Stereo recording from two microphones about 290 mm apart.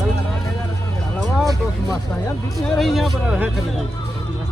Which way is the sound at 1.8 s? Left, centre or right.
Centre.